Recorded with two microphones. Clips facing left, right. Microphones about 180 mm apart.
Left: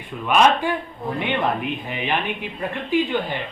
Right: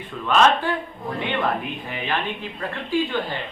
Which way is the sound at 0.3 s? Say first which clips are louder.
Left 1 dB; 15° left (ahead or behind).